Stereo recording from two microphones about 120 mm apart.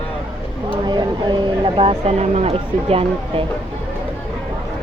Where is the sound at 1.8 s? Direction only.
60° right (ahead or behind).